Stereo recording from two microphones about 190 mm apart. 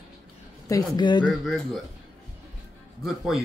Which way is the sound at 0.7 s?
20° left (ahead or behind).